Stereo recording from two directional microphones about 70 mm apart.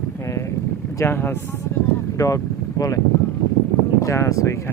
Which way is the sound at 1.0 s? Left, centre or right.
Left.